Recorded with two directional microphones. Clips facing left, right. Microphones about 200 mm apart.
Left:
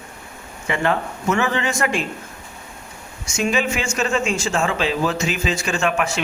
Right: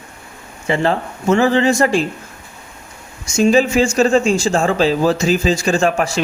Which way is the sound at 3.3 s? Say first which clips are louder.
Right 9 dB; 35° right (ahead or behind).